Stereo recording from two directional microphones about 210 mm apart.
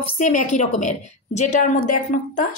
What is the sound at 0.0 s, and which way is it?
A woman's voice, 35° left (ahead or behind).